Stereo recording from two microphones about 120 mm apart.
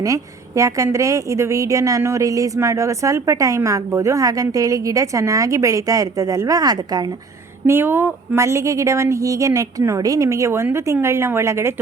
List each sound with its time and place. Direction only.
0.0 s a woman's voice: 25° right (ahead or behind)
7.7 s a woman's voice: 20° right (ahead or behind)